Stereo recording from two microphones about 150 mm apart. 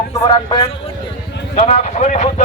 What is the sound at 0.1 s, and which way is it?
Speech, 30° left (ahead or behind).